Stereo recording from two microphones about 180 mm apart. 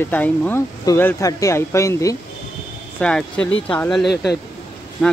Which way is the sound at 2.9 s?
5° left (ahead or behind).